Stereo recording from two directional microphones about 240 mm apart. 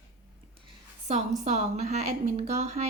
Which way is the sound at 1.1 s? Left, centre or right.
Right.